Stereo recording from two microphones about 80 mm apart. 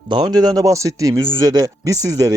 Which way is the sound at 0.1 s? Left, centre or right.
Right.